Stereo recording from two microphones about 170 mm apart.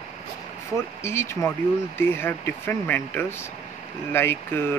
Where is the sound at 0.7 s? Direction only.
15° left (ahead or behind).